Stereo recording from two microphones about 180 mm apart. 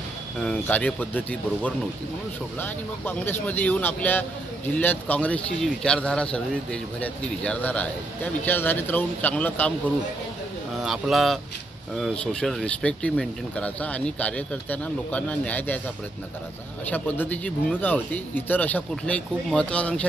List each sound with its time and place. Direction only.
0.4 s a man's voice: 5° left (ahead or behind)
10.8 s a man's voice: centre (ahead or behind)
16.8 s a man's voice: 10° left (ahead or behind)